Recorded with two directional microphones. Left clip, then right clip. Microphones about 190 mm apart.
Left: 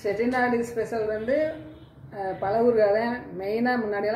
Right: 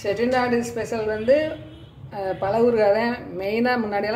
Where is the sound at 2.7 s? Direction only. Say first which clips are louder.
Right 3 dB; 50° right (ahead or behind).